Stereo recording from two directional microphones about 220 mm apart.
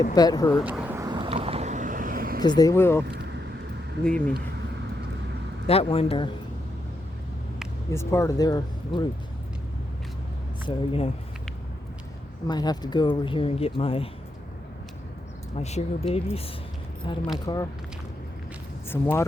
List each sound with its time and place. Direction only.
0.1 s speech: 15° left (ahead or behind)
0.5 s vehicle: 5° right (ahead or behind); by 2.4 s 40° right (ahead or behind)
2.4 s speech: 20° left (ahead or behind)
4.0 s speech: 5° left (ahead or behind)
5.6 s speech: 25° left (ahead or behind)
7.9 s speech: 15° left (ahead or behind)
10.7 s speech: 25° left (ahead or behind)
12.5 s speech: 20° left (ahead or behind)
15.5 s speech: 30° left (ahead or behind)
18.9 s speech: 10° left (ahead or behind)